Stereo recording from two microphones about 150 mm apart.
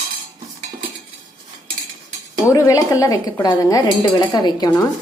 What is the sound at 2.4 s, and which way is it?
A woman's voice, 20° left (ahead or behind).